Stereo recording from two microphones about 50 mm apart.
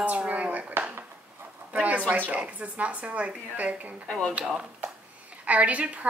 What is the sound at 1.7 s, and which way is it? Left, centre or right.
Speech, right.